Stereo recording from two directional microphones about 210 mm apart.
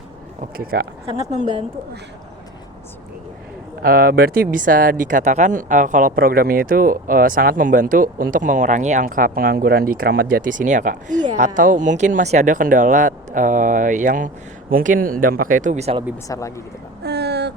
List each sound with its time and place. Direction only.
0.5 s speech: 45° right (ahead or behind)
1.3 s speech: 35° right (ahead or behind)
3.8 s speech: 45° right (ahead or behind); by 16.0 s 30° right (ahead or behind)
16.3 s speech: 15° left (ahead or behind)
17.0 s vehicle: 50° right (ahead or behind)